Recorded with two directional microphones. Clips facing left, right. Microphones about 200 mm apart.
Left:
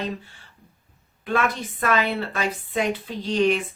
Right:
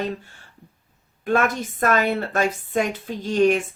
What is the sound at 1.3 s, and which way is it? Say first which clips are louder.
A woman's voice: right 3 dB; 45° right (ahead or behind).